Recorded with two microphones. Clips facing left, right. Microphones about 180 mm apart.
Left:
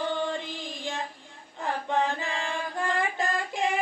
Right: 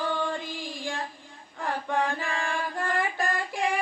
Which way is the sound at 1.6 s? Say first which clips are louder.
Left 1 dB; 20° left (ahead or behind).